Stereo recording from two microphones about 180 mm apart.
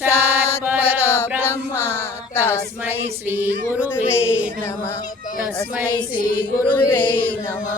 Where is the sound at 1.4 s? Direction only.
15° left (ahead or behind).